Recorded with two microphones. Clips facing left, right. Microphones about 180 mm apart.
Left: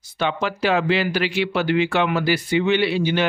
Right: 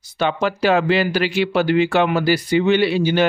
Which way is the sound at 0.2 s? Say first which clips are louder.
Right 3 dB; 45° right (ahead or behind).